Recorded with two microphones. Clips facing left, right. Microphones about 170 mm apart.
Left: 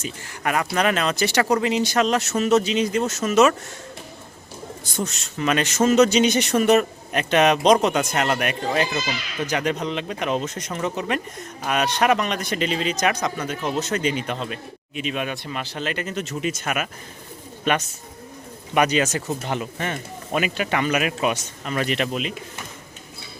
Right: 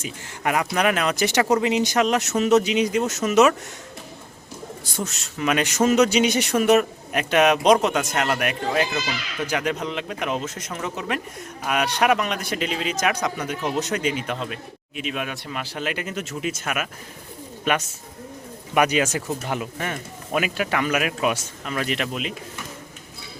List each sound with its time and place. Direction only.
0.0 s speech: 15° right (ahead or behind)
4.9 s speech: 5° right (ahead or behind)
14.0 s speech: 5° right (ahead or behind)
18.7 s speech: 10° right (ahead or behind)